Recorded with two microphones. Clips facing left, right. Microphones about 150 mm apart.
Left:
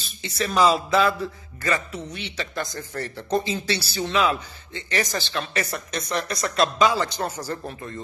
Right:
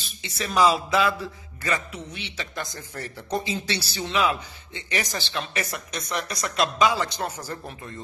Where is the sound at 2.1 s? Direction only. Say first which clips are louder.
Left 3 dB; 45° left (ahead or behind).